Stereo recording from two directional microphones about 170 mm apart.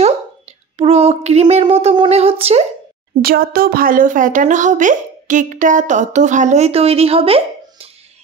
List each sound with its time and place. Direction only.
0.7 s speech: 35° right (ahead or behind)
3.2 s speech: 60° right (ahead or behind); by 7.9 s 35° right (ahead or behind)